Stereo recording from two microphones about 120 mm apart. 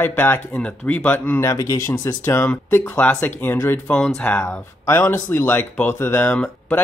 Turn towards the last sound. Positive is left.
turn(degrees=15)  # may be behind; listen again after turning